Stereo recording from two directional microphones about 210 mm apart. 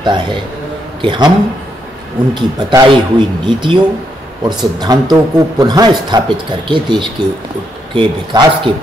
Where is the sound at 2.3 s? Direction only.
20° right (ahead or behind).